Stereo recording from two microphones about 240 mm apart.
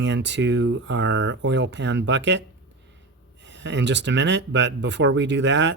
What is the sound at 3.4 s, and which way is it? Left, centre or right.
Speech, right.